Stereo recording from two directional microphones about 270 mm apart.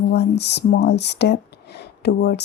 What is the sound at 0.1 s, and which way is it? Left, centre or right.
Speech, left.